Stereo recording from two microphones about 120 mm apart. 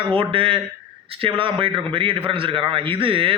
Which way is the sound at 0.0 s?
50° right (ahead or behind).